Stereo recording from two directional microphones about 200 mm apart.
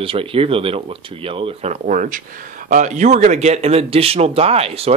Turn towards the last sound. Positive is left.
turn(degrees=-30)  # may be behind; listen again after turning